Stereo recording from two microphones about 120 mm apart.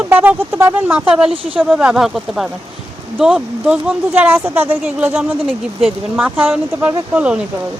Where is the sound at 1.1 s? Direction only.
5° right (ahead or behind).